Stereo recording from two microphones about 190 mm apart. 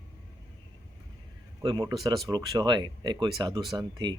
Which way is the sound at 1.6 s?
20° right (ahead or behind).